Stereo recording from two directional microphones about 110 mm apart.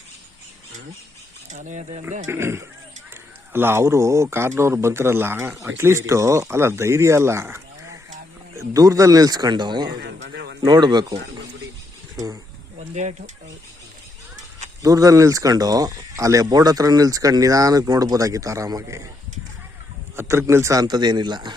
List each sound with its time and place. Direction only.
1.5 s speech: 90° right
2.0 s speech: 25° right (ahead or behind)
12.8 s speech: 85° right
14.8 s speech: 30° right (ahead or behind)
20.1 s speech: 25° right (ahead or behind)
20.8 s speech: 40° right (ahead or behind)